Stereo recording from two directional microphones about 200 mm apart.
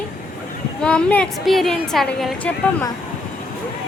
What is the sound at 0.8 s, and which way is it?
Speech, 5° left (ahead or behind).